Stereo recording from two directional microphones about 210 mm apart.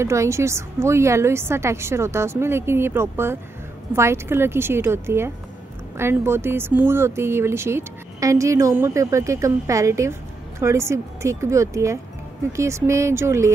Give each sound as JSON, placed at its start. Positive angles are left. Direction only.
{"t": 0.0, "sound": "speech", "side_deg": -15}